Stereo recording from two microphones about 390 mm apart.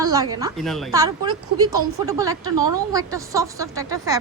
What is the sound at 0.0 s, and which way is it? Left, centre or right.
A woman's voice, centre.